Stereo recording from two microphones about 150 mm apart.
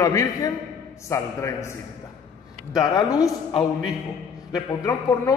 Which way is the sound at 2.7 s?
25° left (ahead or behind).